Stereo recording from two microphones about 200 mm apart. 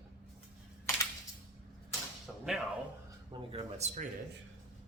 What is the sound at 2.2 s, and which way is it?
Speech, centre (ahead or behind).